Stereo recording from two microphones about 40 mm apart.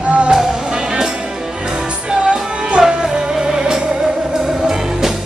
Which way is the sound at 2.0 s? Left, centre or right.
Right.